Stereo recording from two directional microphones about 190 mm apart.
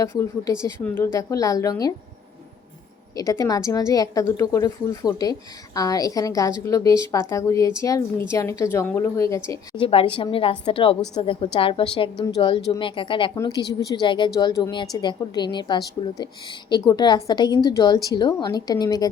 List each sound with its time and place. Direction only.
0.0 s a woman's voice: 15° left (ahead or behind)
3.2 s a woman's voice: 20° left (ahead or behind)
9.5 s a woman's voice: 25° left (ahead or behind)